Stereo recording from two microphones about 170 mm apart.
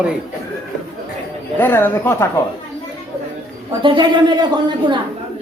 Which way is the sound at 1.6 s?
10° left (ahead or behind).